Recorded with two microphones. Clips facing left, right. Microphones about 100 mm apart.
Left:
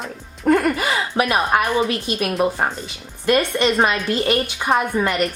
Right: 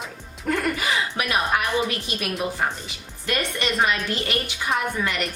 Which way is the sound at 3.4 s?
30° left (ahead or behind).